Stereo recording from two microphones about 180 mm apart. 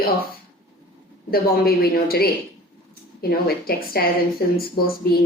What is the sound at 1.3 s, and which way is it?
A woman's voice, 55° left (ahead or behind).